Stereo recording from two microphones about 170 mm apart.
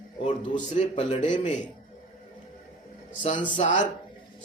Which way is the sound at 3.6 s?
45° left (ahead or behind).